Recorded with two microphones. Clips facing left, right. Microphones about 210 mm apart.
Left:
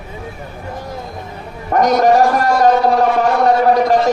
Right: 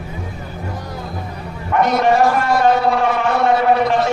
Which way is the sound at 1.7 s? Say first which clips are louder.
Left 3 dB; 40° left (ahead or behind).